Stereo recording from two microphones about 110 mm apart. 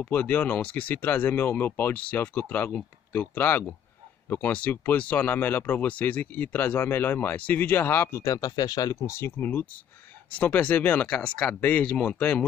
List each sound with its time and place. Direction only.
0.0 s speech: 15° left (ahead or behind)
8.5 s speech: 35° left (ahead or behind); by 12.4 s 10° left (ahead or behind)